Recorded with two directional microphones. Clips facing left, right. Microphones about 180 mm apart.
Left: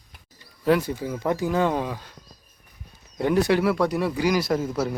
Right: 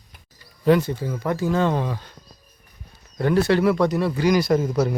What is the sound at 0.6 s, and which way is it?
Speech, 5° left (ahead or behind).